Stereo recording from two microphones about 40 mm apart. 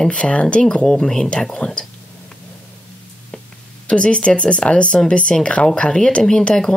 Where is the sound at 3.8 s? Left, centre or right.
Left.